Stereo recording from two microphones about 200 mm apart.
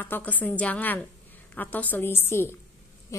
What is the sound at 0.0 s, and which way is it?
A woman's voice, 10° left (ahead or behind).